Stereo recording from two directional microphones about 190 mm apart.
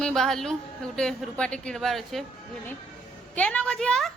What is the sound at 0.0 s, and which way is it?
A woman's voice, centre (ahead or behind).